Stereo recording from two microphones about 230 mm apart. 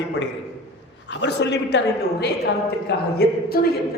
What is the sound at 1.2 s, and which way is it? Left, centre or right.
A man's voice, left.